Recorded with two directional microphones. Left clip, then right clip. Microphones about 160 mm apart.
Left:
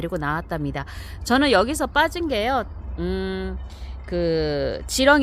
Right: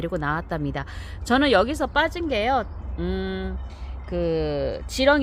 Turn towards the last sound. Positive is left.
turn(degrees=45)  # may be behind; listen again after turning